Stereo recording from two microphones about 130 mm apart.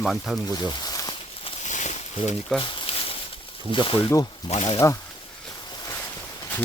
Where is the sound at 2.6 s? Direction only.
45° left (ahead or behind).